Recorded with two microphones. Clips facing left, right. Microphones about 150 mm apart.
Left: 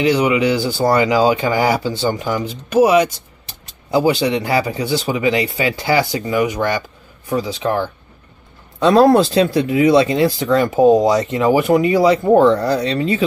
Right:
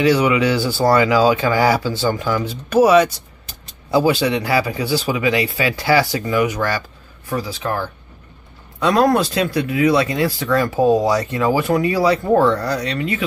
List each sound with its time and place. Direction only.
0.0 s speech: 20° left (ahead or behind)